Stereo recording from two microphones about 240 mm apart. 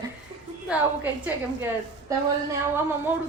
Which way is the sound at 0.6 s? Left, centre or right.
Centre.